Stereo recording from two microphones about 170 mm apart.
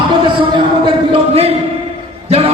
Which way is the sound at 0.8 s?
35° right (ahead or behind).